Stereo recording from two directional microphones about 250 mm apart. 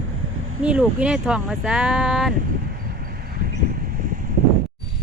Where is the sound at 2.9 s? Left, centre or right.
Right.